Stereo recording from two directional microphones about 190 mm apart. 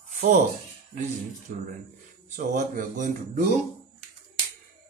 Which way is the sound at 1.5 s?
45° right (ahead or behind).